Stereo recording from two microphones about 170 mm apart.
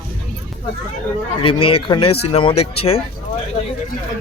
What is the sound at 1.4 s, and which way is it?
Speech, 30° left (ahead or behind).